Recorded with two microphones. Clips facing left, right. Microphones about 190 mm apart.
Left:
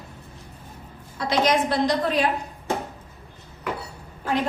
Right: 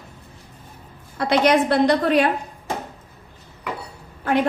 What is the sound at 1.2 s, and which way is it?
A woman's voice, 60° right (ahead or behind).